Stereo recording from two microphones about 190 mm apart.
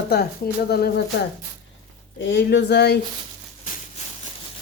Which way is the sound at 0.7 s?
55° left (ahead or behind).